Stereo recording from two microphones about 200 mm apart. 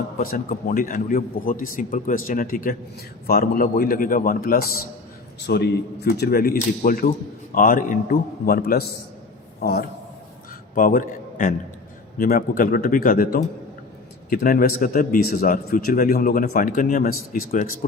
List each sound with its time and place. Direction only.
0.2 s a man's voice: 45° left (ahead or behind)